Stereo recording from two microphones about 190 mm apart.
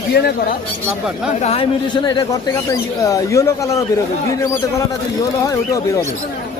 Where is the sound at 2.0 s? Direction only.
20° left (ahead or behind).